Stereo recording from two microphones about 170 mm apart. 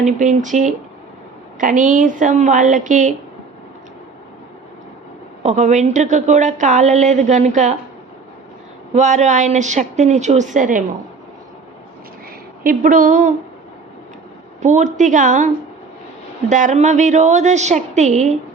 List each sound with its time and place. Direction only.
0.0 s a woman's voice: 45° right (ahead or behind)
5.4 s a woman's voice: 45° right (ahead or behind)
8.9 s a woman's voice: 45° right (ahead or behind)
12.6 s a woman's voice: 50° right (ahead or behind)
14.6 s a woman's voice: 45° right (ahead or behind)